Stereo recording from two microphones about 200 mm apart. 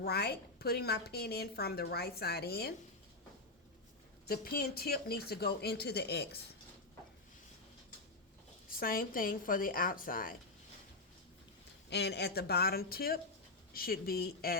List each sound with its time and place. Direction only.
0.0 s a woman's voice: 55° left (ahead or behind)
4.3 s a woman's voice: 50° left (ahead or behind)
8.7 s a woman's voice: 45° left (ahead or behind)
11.9 s a woman's voice: 55° left (ahead or behind)